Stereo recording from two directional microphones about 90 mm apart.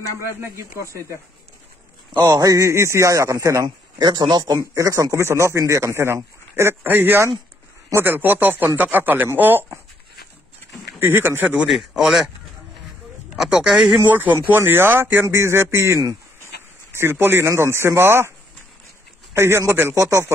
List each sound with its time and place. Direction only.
0.4 s speech: 30° right (ahead or behind)
2.1 s speech: 45° right (ahead or behind)
3.6 s speech: 55° right (ahead or behind)
4.7 s speech: 40° right (ahead or behind); by 9.7 s 20° right (ahead or behind)
11.0 s speech: 25° right (ahead or behind)
11.7 s speech: 5° right (ahead or behind)
13.4 s speech: 10° right (ahead or behind)
14.0 s speech: 20° right (ahead or behind)
19.3 s speech: 30° right (ahead or behind)